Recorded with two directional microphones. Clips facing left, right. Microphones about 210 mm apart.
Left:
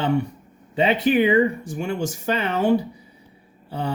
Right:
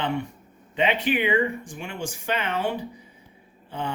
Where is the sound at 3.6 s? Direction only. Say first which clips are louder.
Left 4 dB; 40° left (ahead or behind).